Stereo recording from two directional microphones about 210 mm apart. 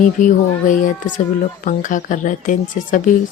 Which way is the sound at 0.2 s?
40° left (ahead or behind).